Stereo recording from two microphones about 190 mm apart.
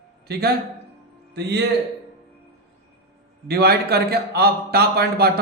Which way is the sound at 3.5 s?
55° right (ahead or behind).